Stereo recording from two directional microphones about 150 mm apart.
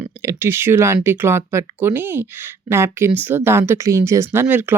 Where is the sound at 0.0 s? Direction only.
15° right (ahead or behind).